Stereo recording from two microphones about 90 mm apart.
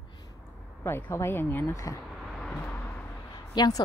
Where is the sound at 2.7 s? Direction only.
20° left (ahead or behind).